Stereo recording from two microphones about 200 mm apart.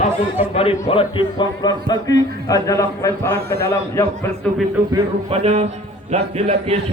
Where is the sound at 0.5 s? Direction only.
25° left (ahead or behind).